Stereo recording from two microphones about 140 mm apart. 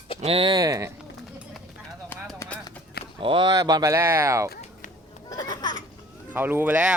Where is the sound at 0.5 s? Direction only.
25° right (ahead or behind).